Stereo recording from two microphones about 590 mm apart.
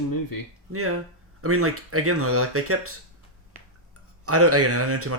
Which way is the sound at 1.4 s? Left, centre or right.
Right.